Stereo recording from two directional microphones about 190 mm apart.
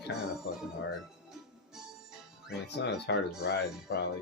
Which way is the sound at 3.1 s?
65° left (ahead or behind).